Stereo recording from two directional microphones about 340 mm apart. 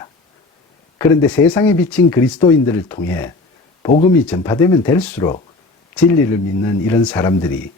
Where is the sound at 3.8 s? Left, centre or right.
Centre.